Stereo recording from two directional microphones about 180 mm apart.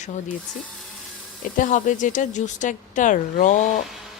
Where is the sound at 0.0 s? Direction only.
40° left (ahead or behind).